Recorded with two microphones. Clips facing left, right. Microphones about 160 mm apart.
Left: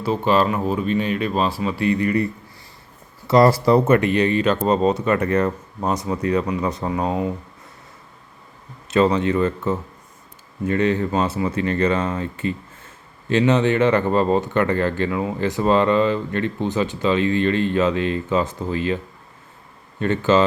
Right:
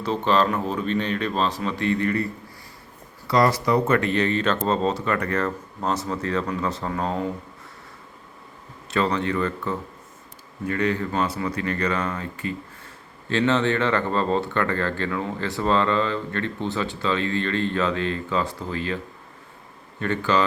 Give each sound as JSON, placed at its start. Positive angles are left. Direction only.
{"t": 0.0, "sound": "speech", "side_deg": 10}
{"t": 3.2, "sound": "speech", "side_deg": 30}
{"t": 3.9, "sound": "speech", "side_deg": 15}
{"t": 8.9, "sound": "speech", "side_deg": 20}
{"t": 20.0, "sound": "speech", "side_deg": 20}